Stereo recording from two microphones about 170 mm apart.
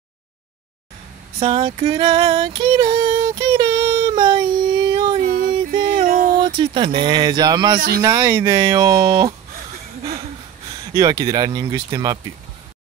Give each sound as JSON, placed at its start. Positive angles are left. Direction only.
{"t": 1.4, "sound": "female singing", "side_deg": -35}
{"t": 4.9, "sound": "a sound", "side_deg": -30}
{"t": 5.2, "sound": "music", "side_deg": -60}
{"t": 6.0, "sound": "a sound", "side_deg": -50}
{"t": 6.4, "sound": "speech", "side_deg": -30}
{"t": 10.9, "sound": "speech", "side_deg": -20}